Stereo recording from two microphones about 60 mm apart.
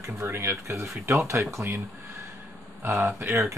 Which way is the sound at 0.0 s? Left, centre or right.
Right.